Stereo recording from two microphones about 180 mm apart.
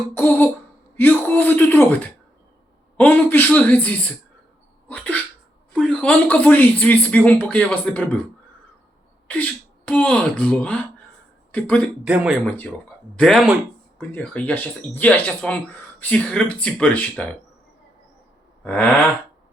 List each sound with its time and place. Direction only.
0.1 s a sound: 10° left (ahead or behind)
0.9 s speech: 10° left (ahead or behind)
4.9 s cough: 5° left (ahead or behind)
5.7 s speech: 5° left (ahead or behind)
9.2 s speech: 10° left (ahead or behind)
12.0 s speech: 5° right (ahead or behind)
12.5 s speech: 10° left (ahead or behind)
18.6 s a sound: 10° left (ahead or behind)